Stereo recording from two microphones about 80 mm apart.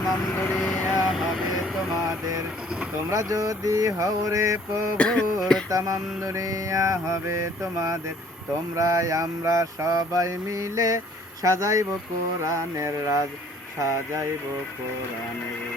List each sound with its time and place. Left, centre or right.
0.0 s speech: left
0.4 s vehicle: left
1.0 s vehicle: centre
2.0 s vehicle: right
3.1 s mantra: right
4.9 s a sound: centre
5.7 s mantra: right
11.4 s a man's voice: right
12.5 s mantra: right